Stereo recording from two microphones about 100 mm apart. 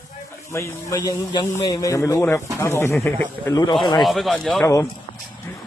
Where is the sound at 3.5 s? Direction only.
40° left (ahead or behind).